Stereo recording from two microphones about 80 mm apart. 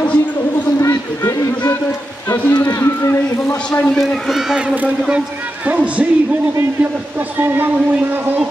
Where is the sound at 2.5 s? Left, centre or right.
Left.